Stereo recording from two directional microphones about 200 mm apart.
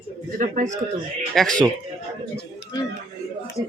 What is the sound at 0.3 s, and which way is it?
Speech, 40° right (ahead or behind).